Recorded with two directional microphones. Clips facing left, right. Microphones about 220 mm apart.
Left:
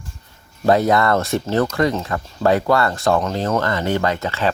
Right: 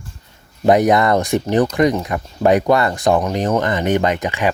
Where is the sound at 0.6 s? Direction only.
20° right (ahead or behind).